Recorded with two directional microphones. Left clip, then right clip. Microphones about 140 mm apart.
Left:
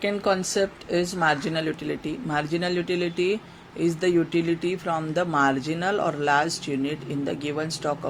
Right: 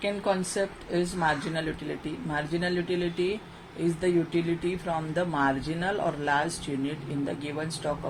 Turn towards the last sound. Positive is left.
turn(degrees=60)  # may be behind; listen again after turning